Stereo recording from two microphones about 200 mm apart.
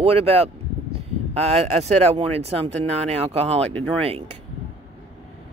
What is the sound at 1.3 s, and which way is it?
Speech, 35° right (ahead or behind).